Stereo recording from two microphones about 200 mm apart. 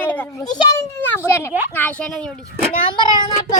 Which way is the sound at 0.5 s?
20° left (ahead or behind).